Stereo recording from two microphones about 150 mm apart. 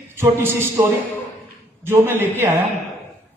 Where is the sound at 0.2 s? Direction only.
15° right (ahead or behind).